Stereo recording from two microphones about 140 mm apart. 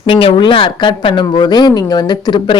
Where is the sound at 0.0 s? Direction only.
40° left (ahead or behind).